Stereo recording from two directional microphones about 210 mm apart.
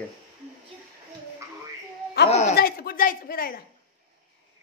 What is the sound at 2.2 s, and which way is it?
Speech, 30° left (ahead or behind).